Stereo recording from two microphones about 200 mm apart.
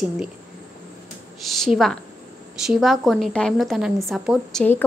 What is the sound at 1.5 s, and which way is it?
Speech, centre (ahead or behind).